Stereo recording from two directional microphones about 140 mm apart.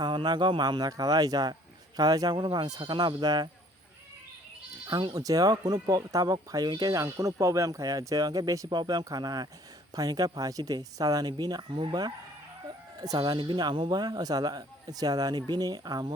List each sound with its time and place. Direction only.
0.0 s speech: 30° right (ahead or behind)
4.9 s speech: 30° right (ahead or behind)